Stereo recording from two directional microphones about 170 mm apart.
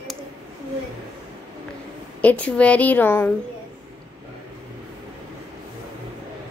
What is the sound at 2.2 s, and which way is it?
Speech, 10° left (ahead or behind).